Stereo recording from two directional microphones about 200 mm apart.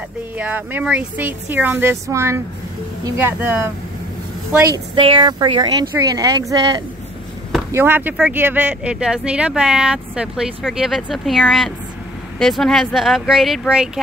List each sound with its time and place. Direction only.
0.4 s speech: 10° right (ahead or behind)
4.9 s speech: 25° right (ahead or behind)
7.7 s speech: 10° right (ahead or behind)